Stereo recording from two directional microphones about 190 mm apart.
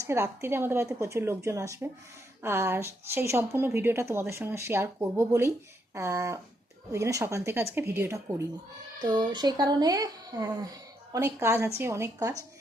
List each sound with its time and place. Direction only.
0.0 s speech: 15° right (ahead or behind)